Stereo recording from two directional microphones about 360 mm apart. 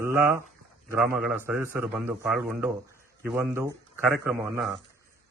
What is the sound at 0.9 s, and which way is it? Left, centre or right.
A man's voice, centre.